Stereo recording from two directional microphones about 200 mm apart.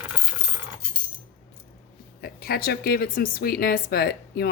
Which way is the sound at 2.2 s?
50° left (ahead or behind).